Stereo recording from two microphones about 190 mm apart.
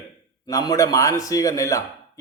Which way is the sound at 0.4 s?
20° left (ahead or behind).